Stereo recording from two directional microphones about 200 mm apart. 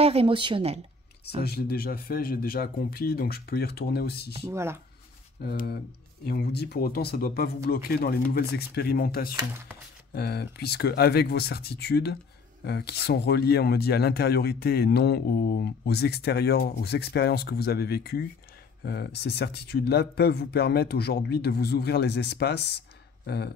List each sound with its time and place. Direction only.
0.0 s speech: 30° right (ahead or behind)
1.2 s speech: 55° left (ahead or behind)
4.5 s speech: 10° right (ahead or behind)
5.4 s speech: 55° left (ahead or behind)
9.3 s speech: 15° right (ahead or behind)
10.1 s speech: 55° left (ahead or behind)